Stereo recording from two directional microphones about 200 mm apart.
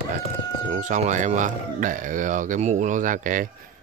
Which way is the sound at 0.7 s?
35° right (ahead or behind).